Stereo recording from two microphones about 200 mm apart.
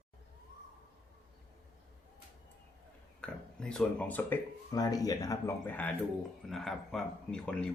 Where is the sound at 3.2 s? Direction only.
5° left (ahead or behind).